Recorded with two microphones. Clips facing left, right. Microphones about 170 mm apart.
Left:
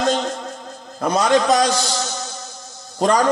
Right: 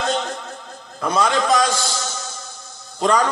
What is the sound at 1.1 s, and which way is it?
Speech, 45° left (ahead or behind).